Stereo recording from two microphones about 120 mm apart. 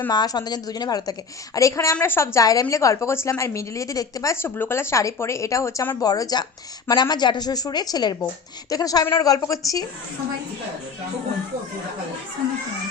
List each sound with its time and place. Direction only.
0.1 s a woman's voice: 35° left (ahead or behind); by 6.0 s 20° left (ahead or behind)
6.0 s a woman's voice: 30° left (ahead or behind)